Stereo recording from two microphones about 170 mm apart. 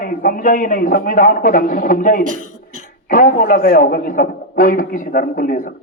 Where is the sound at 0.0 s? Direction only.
55° left (ahead or behind).